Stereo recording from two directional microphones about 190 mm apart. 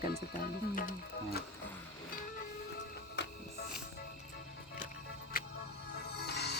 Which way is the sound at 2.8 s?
65° left (ahead or behind).